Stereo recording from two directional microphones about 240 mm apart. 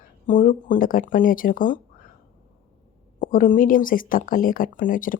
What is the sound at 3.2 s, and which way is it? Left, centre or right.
Speech, left.